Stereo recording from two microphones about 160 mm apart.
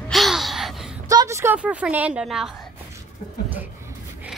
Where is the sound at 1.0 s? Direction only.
20° right (ahead or behind); by 2.5 s 5° right (ahead or behind).